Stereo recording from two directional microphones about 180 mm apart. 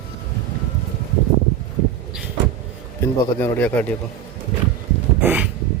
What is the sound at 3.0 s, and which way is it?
Speech, 15° left (ahead or behind).